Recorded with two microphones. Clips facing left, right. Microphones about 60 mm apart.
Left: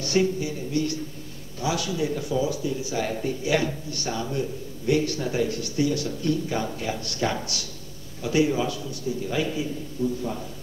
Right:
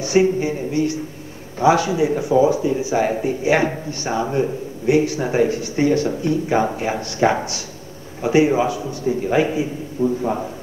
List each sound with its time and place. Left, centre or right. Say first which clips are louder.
0.0 s speech: right 7 dB; right
8.8 s a man's voice: right 8 dB; right
10.0 s a man's voice: right 8 dB; right